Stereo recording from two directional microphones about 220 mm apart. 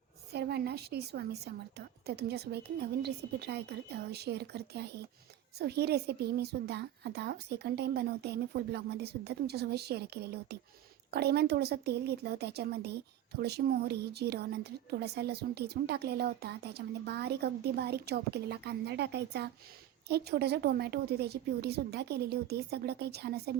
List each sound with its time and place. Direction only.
0.3 s a woman's voice: 45° right (ahead or behind)